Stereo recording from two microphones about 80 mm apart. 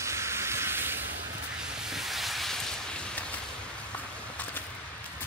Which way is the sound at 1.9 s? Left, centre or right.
Centre.